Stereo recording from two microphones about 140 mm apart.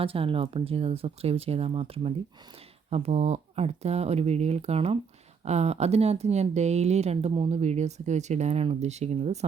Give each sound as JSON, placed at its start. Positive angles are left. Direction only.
{"t": 0.0, "sound": "speech", "side_deg": -40}